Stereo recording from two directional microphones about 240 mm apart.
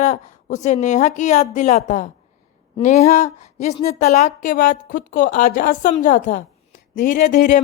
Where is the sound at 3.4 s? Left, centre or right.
Left.